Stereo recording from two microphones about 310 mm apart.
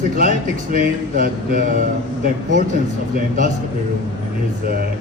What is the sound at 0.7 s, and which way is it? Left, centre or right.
Speech, right.